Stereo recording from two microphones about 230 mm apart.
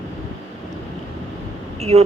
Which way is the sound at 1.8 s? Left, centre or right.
Right.